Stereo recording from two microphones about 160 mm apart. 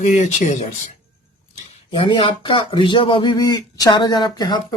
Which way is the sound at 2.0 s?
30° left (ahead or behind).